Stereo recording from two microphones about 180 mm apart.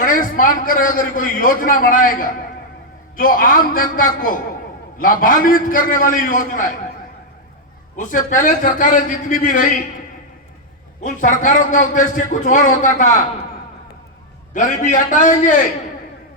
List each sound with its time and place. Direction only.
0.0 s a man's voice: 50° left (ahead or behind)
7.9 s a man's voice: 45° left (ahead or behind)
11.0 s a man's voice: 45° left (ahead or behind)
14.5 s a man's voice: 45° left (ahead or behind)